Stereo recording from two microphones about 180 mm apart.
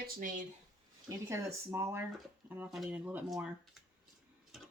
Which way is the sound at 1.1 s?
15° right (ahead or behind).